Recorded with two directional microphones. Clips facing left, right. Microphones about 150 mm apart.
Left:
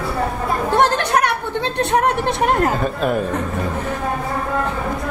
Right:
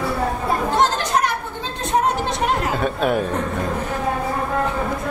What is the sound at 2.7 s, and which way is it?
Speech, centre (ahead or behind).